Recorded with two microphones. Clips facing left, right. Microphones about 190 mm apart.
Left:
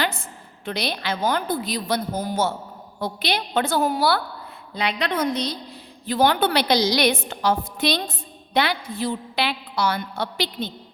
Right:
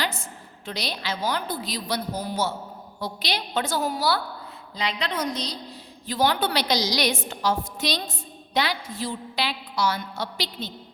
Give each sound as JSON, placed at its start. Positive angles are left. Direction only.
{"t": 0.0, "sound": "a woman's voice", "side_deg": 55}